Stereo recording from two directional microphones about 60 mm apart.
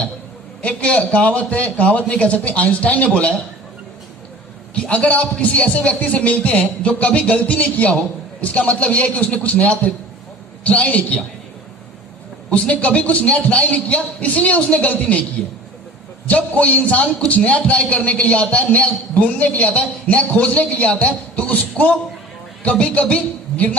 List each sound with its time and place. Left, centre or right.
0.6 s speech: left
4.7 s speech: centre
12.5 s speech: left
16.2 s speech: left